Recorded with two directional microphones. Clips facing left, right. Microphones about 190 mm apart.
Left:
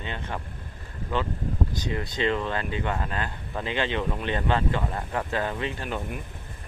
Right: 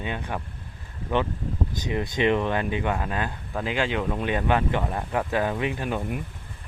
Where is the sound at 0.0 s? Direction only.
15° right (ahead or behind).